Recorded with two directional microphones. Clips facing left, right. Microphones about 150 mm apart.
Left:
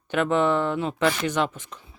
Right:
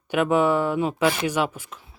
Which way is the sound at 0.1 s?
10° right (ahead or behind).